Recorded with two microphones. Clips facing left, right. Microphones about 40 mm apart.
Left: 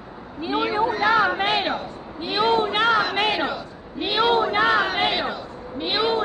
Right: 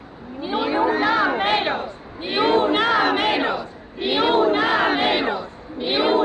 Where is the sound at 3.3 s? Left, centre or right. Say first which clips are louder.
Right 3 dB; right.